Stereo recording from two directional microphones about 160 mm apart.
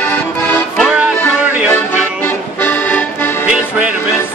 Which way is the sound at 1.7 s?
15° left (ahead or behind).